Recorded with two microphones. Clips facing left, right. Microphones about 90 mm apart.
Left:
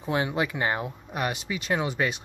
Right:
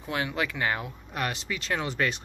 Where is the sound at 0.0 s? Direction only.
25° left (ahead or behind).